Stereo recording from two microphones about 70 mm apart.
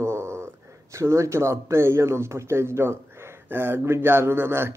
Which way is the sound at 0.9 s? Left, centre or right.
Right.